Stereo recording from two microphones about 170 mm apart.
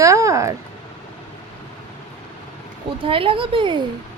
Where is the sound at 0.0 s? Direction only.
20° right (ahead or behind).